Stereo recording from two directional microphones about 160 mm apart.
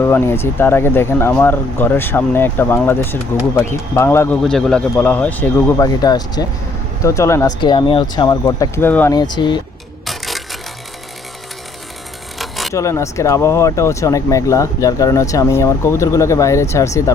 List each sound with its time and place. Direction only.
0.0 s speech: 15° left (ahead or behind)
4.4 s speech: 5° left (ahead or behind)
7.6 s speech: 30° left (ahead or behind); by 9.1 s 10° left (ahead or behind)
9.1 s speech: 25° left (ahead or behind)
10.1 s a sound: centre (ahead or behind)
12.4 s a sound: centre (ahead or behind)
12.7 s speech: 20° left (ahead or behind)